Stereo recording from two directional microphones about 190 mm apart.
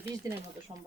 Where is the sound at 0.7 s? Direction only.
30° right (ahead or behind).